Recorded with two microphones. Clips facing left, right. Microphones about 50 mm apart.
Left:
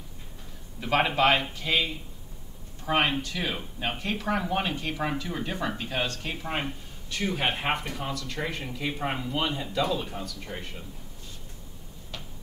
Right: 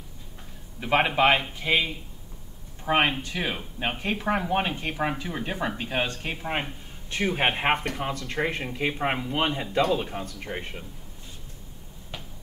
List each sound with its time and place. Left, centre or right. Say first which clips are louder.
0.7 s speech: right 2 dB; centre; by 9.9 s right
9.9 s speech: right 3 dB; right